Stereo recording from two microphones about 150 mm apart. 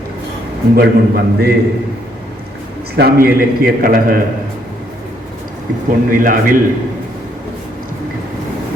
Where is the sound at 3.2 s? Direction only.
75° right (ahead or behind).